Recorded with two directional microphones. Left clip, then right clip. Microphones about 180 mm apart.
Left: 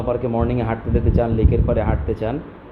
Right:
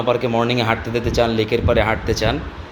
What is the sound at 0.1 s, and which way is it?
A man's voice, 10° right (ahead or behind).